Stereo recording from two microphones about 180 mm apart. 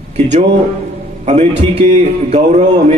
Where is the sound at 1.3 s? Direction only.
40° right (ahead or behind).